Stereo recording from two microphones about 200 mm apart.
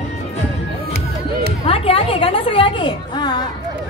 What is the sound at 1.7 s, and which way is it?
A woman's voice, 30° left (ahead or behind).